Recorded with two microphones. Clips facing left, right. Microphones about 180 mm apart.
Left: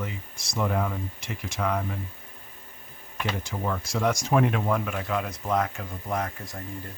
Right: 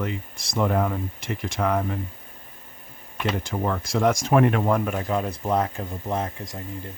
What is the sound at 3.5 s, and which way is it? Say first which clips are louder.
Speech: right 3 dB; 50° right (ahead or behind).